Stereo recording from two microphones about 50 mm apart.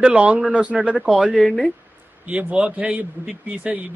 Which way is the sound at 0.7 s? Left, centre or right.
Centre.